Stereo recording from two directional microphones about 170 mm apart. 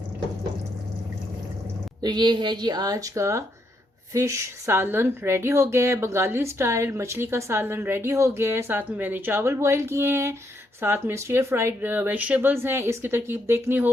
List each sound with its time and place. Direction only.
2.0 s a woman's voice: 25° right (ahead or behind)